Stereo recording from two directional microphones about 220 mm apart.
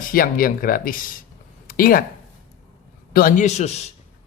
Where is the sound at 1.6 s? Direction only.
40° left (ahead or behind).